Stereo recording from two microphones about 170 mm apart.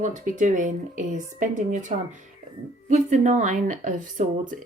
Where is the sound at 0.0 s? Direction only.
45° right (ahead or behind).